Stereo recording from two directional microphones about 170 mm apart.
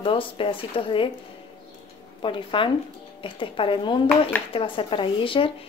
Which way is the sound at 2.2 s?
30° left (ahead or behind).